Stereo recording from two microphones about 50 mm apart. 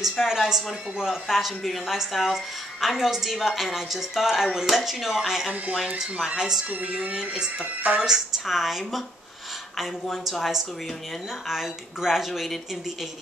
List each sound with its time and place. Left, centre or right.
0.2 s a woman's voice: centre
5.9 s a woman's voice: centre
6.7 s music: right
7.2 s a woman's voice: centre
7.6 s speech: right
8.0 s speech: centre
11.4 s speech: centre